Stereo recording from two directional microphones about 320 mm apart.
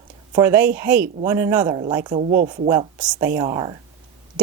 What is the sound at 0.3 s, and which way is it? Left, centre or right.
Speech, centre.